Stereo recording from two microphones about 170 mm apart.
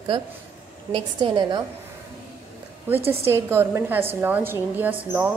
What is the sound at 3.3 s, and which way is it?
Speech, 15° right (ahead or behind).